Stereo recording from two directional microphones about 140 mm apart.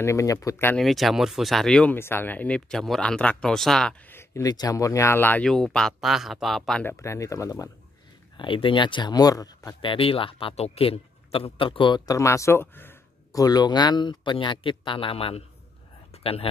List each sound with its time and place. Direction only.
0.0 s speech: 20° left (ahead or behind)
0.7 s speech: centre (ahead or behind)
2.0 s speech: 15° left (ahead or behind)
4.1 s speech: 20° left (ahead or behind); by 6.8 s centre (ahead or behind)
6.8 s speech: 20° left (ahead or behind)
8.4 s a man's voice: 35° left (ahead or behind)
9.8 s a man's voice: 40° left (ahead or behind)
12.2 s a sound: 20° left (ahead or behind)
13.4 s a man's voice: 30° left (ahead or behind)
16.1 s a sound: 45° left (ahead or behind)